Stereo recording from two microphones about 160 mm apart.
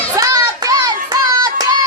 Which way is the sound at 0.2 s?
20° right (ahead or behind).